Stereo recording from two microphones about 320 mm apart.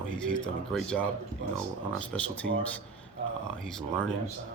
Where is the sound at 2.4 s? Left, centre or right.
Right.